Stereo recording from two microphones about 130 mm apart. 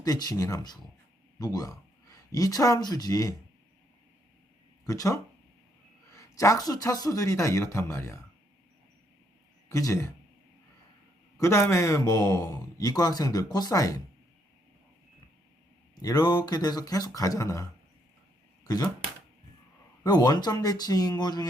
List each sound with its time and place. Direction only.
0.0 s a man's voice: 30° left (ahead or behind)
4.9 s a man's voice: 25° left (ahead or behind)
9.6 s a man's voice: 25° left (ahead or behind)
11.3 s a man's voice: 20° left (ahead or behind)
16.0 s a man's voice: 30° left (ahead or behind)
20.1 s speech: 30° left (ahead or behind)